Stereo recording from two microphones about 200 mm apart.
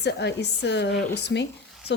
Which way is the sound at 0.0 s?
60° left (ahead or behind).